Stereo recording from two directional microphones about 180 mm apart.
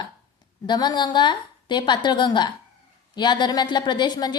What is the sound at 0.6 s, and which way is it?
Speech, 25° left (ahead or behind).